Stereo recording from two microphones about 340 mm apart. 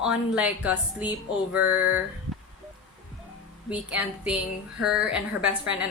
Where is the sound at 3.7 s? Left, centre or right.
Centre.